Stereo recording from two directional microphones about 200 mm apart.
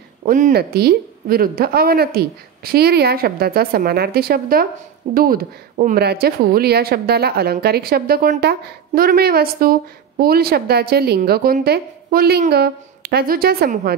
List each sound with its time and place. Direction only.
0.2 s speech: 40° right (ahead or behind)